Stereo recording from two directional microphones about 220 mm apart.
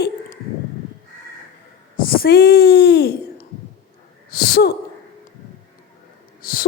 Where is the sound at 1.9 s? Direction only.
40° left (ahead or behind).